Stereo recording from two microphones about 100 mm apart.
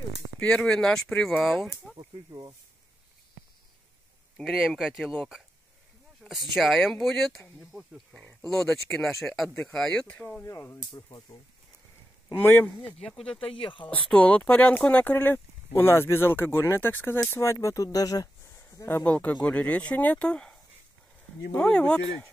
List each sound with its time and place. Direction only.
0.4 s speech: 5° left (ahead or behind)
4.4 s speech: 5° right (ahead or behind)
8.2 s a sound: 15° left (ahead or behind)
8.5 s speech: 5° left (ahead or behind)
10.4 s speech: 30° left (ahead or behind)
10.8 s speech: 45° left (ahead or behind)
12.4 s speech: 20° left (ahead or behind)
13.0 s speech: 10° left (ahead or behind)
13.4 s speech: 60° left (ahead or behind)
13.8 s speech: 10° left (ahead or behind); by 18.3 s 40° left (ahead or behind)
18.6 s a sound: 25° left (ahead or behind)
19.0 s speech: 15° left (ahead or behind)